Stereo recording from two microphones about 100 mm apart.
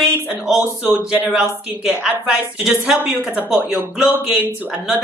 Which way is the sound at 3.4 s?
5° right (ahead or behind).